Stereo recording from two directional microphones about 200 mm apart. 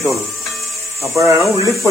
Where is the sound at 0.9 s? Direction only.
15° right (ahead or behind).